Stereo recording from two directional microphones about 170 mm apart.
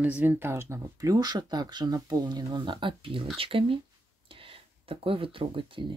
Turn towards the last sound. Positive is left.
turn(degrees=-30)  # may be behind; listen again after turning